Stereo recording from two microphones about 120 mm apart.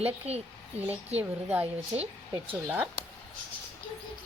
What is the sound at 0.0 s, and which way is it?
Speech, 60° right (ahead or behind).